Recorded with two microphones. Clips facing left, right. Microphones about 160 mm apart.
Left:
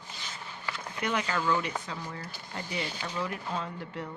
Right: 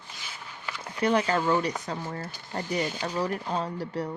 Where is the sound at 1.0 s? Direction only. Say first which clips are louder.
Right 7 dB; 35° right (ahead or behind).